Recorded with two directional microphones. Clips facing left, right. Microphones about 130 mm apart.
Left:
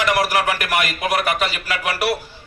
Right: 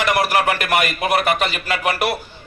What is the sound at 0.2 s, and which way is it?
A man's voice, 25° right (ahead or behind).